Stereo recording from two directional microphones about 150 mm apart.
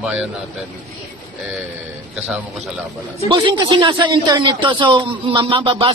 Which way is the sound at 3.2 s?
30° right (ahead or behind).